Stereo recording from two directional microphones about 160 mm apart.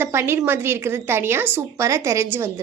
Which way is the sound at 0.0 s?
15° right (ahead or behind).